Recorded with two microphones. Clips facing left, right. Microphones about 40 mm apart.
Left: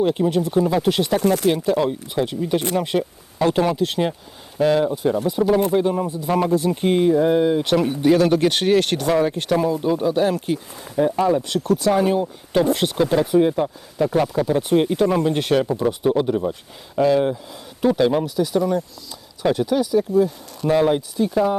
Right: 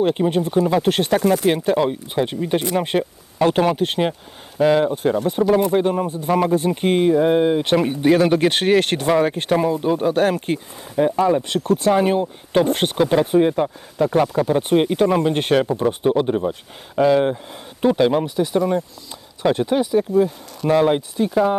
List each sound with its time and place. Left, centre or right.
0.0 s speech: right
0.9 s speech: right
1.5 s speech: right